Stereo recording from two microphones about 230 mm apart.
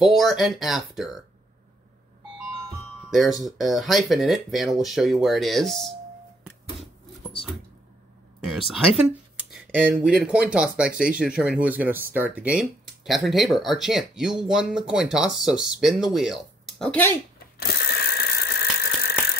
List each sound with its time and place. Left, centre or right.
0.0 s speech: centre
3.1 s speech: centre
8.4 s speech: centre
17.6 s mechanisms: left